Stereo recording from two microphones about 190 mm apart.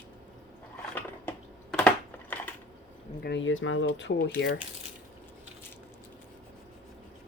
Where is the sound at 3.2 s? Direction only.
75° left (ahead or behind); by 4.6 s 60° left (ahead or behind).